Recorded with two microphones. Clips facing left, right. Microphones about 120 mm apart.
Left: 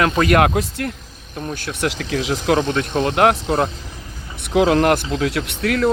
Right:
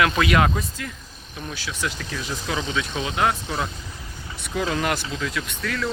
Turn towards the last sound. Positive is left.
turn(degrees=65)  # may be behind; listen again after turning